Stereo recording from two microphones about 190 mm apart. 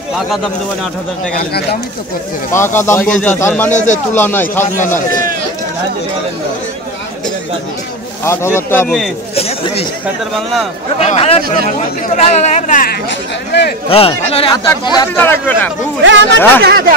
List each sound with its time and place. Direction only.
2.5 s speech: 15° left (ahead or behind)
3.7 s speech: 40° left (ahead or behind)
4.1 s speech: 10° left (ahead or behind)
8.2 s a man's voice: 15° left (ahead or behind)
9.3 s a sound: 30° left (ahead or behind)
11.0 s speech: 35° left (ahead or behind); by 13.7 s 60° left (ahead or behind)
13.8 s a man's voice: 30° left (ahead or behind)
15.1 s speech: 10° left (ahead or behind)
16.0 s speech: 75° right (ahead or behind)
16.6 s speech: 50° right (ahead or behind)